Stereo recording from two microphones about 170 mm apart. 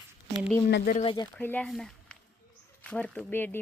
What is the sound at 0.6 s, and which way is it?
Speech, 60° left (ahead or behind).